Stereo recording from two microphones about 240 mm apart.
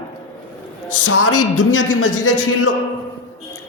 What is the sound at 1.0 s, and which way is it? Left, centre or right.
Speech, left.